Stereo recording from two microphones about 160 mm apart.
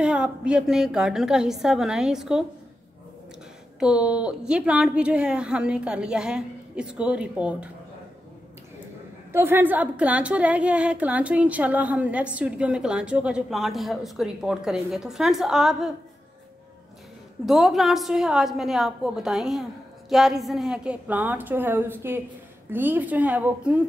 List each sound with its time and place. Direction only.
0.0 s a woman's voice: 5° right (ahead or behind)
3.8 s a woman's voice: 5° right (ahead or behind)
9.3 s a woman's voice: 15° right (ahead or behind)
17.5 s a woman's voice: centre (ahead or behind)